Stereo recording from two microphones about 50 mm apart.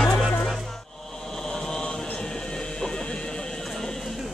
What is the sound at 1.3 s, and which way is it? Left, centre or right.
Music, centre.